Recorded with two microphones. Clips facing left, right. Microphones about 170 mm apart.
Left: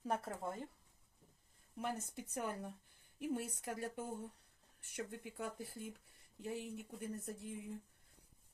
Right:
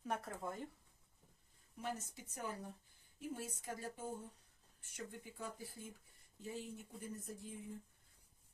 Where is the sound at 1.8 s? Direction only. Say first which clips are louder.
Left 3 dB; 55° left (ahead or behind).